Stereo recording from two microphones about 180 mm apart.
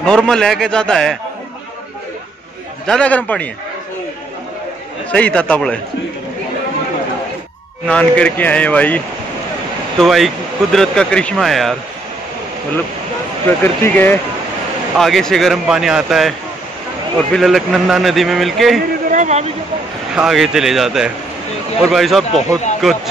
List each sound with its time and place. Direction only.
0.0 s speech: 5° left (ahead or behind)
2.9 s a man's voice: 5° left (ahead or behind)
5.1 s a man's voice: 5° left (ahead or behind)
7.8 s a man's voice: 5° left (ahead or behind)
13.8 s a man's voice: 10° left (ahead or behind)
19.0 s a sound: 40° right (ahead or behind)
20.2 s speech: centre (ahead or behind)